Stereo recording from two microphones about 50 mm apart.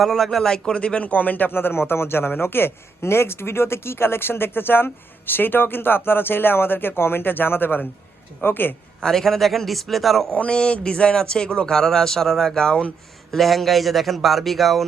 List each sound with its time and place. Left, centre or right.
0.0 s speech: centre
0.8 s speech: left
9.0 s speech: centre
10.3 s speech: left
13.3 s speech: centre